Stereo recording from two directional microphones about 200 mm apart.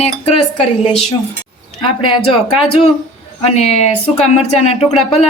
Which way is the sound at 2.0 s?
25° left (ahead or behind).